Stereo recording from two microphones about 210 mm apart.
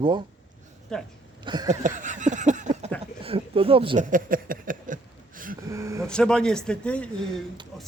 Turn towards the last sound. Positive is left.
turn(degrees=5)  # may be behind; listen again after turning